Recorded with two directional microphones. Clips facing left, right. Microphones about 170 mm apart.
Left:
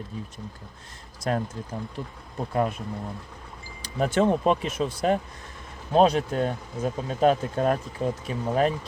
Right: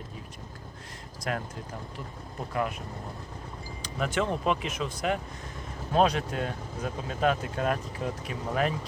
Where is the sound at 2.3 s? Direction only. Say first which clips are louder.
Left 5 dB; 30° left (ahead or behind).